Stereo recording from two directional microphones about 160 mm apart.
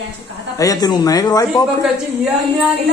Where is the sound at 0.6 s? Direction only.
25° left (ahead or behind).